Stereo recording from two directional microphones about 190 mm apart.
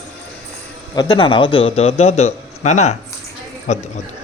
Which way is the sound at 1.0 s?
25° left (ahead or behind).